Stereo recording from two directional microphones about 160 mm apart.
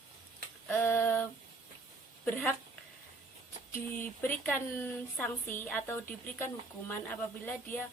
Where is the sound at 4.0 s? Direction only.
10° left (ahead or behind).